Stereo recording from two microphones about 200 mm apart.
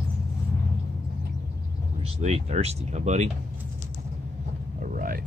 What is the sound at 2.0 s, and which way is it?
Speech, 30° right (ahead or behind).